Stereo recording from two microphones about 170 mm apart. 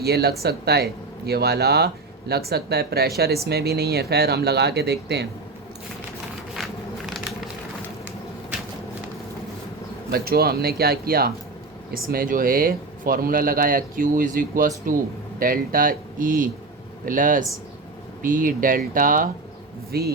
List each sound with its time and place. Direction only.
0.0 s speech: 70° right (ahead or behind)
10.1 s speech: 65° right (ahead or behind)
19.9 s speech: 70° right (ahead or behind)